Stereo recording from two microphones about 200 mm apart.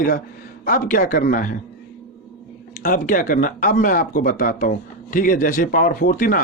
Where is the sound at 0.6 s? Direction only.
45° left (ahead or behind).